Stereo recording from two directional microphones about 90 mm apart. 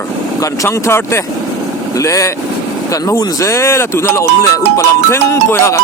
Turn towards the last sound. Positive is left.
turn(degrees=35)  # may be behind; listen again after turning